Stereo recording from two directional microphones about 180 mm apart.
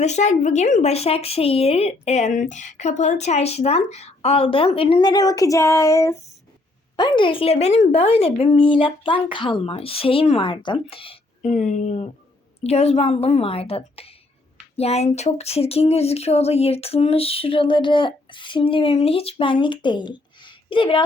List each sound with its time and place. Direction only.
0.0 s speech: 40° left (ahead or behind)